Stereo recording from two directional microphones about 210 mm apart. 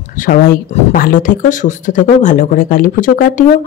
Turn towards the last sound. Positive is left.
turn(degrees=35)  # may be behind; listen again after turning